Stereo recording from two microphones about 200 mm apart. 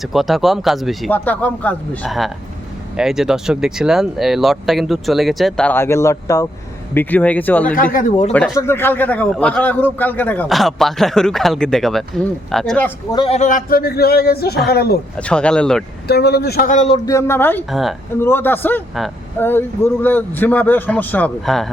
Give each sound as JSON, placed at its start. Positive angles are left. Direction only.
{"t": 0.0, "sound": "a man's voice", "side_deg": 0}
{"t": 7.8, "sound": "a man's voice", "side_deg": 45}
{"t": 8.3, "sound": "a man's voice", "side_deg": 5}
{"t": 13.1, "sound": "a man's voice", "side_deg": 30}
{"t": 15.2, "sound": "a man's voice", "side_deg": 5}
{"t": 16.0, "sound": "a man's voice", "side_deg": 55}
{"t": 17.1, "sound": "a man's voice", "side_deg": 15}
{"t": 17.7, "sound": "a man's voice", "side_deg": 0}
{"t": 18.2, "sound": "a man's voice", "side_deg": 10}